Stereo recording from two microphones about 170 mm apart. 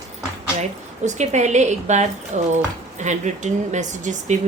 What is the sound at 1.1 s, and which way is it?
A woman's voice, 45° right (ahead or behind).